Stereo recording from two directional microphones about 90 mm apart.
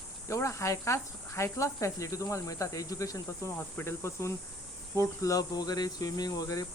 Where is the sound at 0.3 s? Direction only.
35° left (ahead or behind).